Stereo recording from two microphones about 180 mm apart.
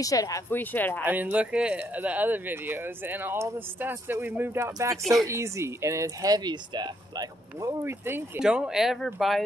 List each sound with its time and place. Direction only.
0.0 s speech: 20° left (ahead or behind)
1.0 s speech: 10° right (ahead or behind)
8.4 s speech: 5° right (ahead or behind)